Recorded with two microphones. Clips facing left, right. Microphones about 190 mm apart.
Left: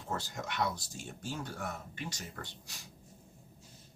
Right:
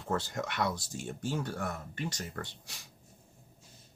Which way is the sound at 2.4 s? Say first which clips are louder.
Right 5 dB; 60° right (ahead or behind).